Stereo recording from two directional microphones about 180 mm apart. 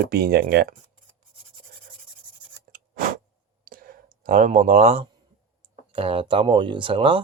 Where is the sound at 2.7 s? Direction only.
50° right (ahead or behind).